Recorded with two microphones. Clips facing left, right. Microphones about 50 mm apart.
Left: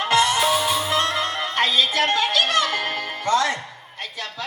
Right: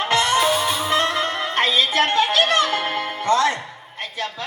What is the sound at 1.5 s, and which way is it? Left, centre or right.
Music, right.